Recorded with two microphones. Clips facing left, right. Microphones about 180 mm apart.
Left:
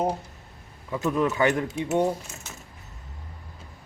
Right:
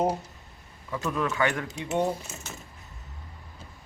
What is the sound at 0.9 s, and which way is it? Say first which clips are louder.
Speech: left 5 dB; 20° left (ahead or behind).